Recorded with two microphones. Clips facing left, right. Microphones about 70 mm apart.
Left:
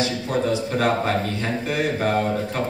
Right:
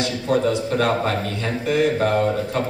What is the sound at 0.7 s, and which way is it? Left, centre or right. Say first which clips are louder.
Speech: right 1 dB; centre.